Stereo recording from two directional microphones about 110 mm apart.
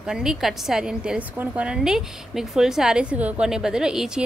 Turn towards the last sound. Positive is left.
turn(degrees=-5)  # may be behind; listen again after turning